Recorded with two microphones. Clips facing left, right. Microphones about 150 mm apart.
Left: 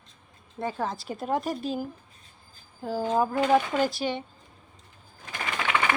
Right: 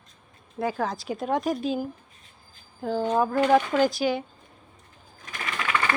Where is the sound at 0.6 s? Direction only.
Centre (ahead or behind).